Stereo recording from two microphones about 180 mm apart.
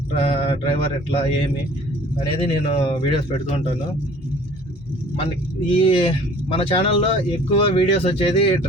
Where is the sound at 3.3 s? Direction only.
35° left (ahead or behind).